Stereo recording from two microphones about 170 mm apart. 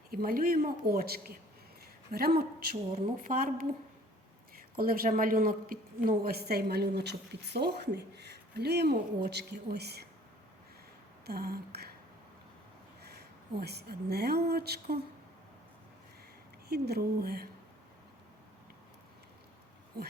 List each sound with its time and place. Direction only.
0.1 s a woman's voice: 60° right (ahead or behind)
11.3 s a woman's voice: 65° right (ahead or behind)
13.0 s speech: 75° right (ahead or behind)
16.6 s a woman's voice: 70° right (ahead or behind)
19.9 s speech: 65° right (ahead or behind)